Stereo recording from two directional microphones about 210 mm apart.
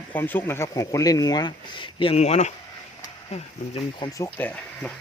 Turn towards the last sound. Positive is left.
turn(degrees=5)  # may be behind; listen again after turning